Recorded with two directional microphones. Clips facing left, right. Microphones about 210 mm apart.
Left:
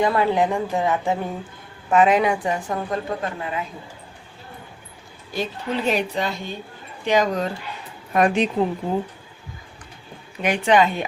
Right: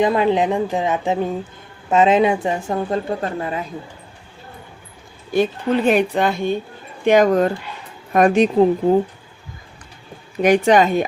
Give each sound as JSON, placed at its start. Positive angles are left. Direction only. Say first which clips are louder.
{"t": 0.0, "sound": "a woman's voice", "louder": "right 3 dB", "side_deg": -20}
{"t": 5.3, "sound": "a woman's voice", "louder": "right 8 dB", "side_deg": -55}
{"t": 10.4, "sound": "a woman's voice", "louder": "right 5 dB", "side_deg": -45}